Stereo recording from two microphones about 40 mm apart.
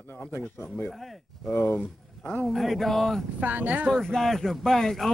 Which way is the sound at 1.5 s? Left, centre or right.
Left.